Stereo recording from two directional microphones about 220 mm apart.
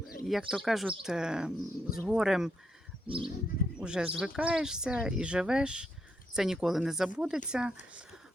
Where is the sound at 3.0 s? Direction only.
25° right (ahead or behind).